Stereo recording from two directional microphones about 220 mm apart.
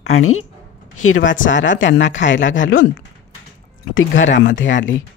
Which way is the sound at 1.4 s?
55° left (ahead or behind).